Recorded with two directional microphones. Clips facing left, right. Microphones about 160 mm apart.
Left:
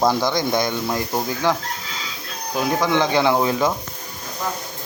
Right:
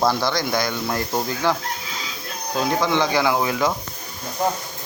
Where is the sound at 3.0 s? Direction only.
20° left (ahead or behind).